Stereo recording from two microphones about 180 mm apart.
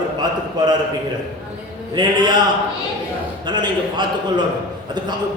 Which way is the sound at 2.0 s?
25° right (ahead or behind).